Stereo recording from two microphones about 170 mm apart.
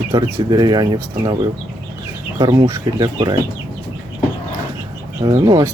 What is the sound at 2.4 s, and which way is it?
Speech, 25° right (ahead or behind).